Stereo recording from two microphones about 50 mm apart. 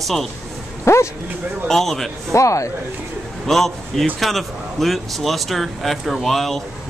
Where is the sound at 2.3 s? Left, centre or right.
Left.